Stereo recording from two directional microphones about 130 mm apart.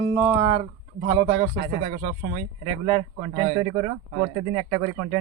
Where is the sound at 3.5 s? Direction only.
30° right (ahead or behind).